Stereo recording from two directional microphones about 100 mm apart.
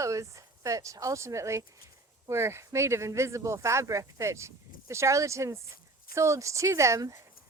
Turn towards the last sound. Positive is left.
turn(degrees=-30)  # may be behind; listen again after turning